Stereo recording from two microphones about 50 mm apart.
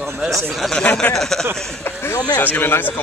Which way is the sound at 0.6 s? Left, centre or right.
Centre.